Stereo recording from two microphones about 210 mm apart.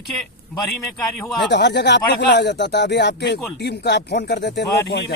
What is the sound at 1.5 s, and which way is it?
Speech, 55° left (ahead or behind).